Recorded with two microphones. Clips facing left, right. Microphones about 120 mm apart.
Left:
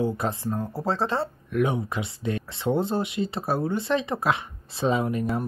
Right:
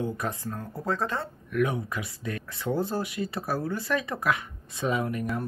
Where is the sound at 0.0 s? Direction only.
30° left (ahead or behind).